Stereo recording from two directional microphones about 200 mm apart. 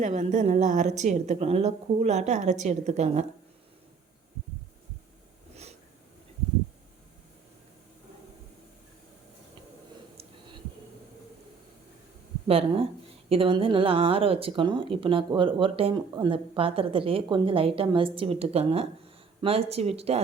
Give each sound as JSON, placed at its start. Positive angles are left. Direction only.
{"t": 0.0, "sound": "a woman's voice", "side_deg": -35}
{"t": 12.5, "sound": "a woman's voice", "side_deg": -30}